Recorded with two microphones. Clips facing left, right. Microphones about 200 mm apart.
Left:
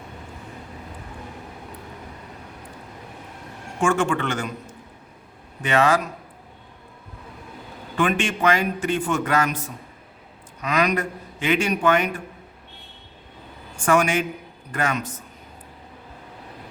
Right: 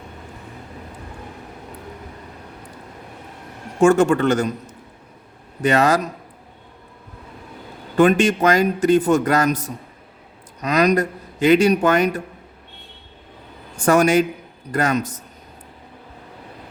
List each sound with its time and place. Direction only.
3.8 s a man's voice: 40° right (ahead or behind)
7.9 s a man's voice: 40° right (ahead or behind)
13.7 s a man's voice: 40° right (ahead or behind)